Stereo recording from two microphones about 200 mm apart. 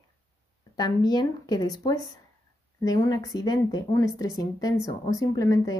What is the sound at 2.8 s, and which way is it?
Speech, 15° left (ahead or behind).